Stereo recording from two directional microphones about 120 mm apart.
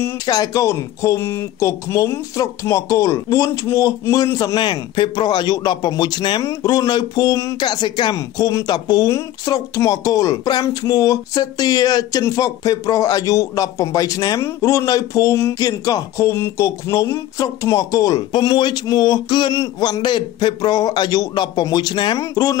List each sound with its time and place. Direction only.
0.3 s speech: 30° left (ahead or behind)
4.6 s speech: 40° left (ahead or behind)